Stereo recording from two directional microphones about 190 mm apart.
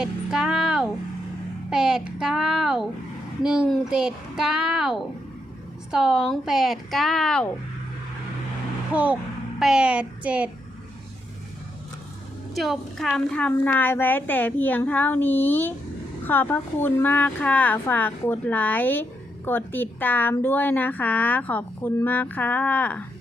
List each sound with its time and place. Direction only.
0.0 s a sound: 5° right (ahead or behind)
1.7 s a child's voice: 5° right (ahead or behind)
8.9 s a woman's voice: 10° right (ahead or behind)
12.5 s speech: centre (ahead or behind)